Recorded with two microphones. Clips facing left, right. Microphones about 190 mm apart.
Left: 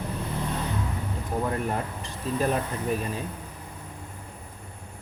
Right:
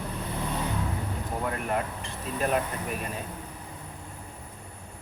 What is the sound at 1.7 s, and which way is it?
Speech, 35° left (ahead or behind).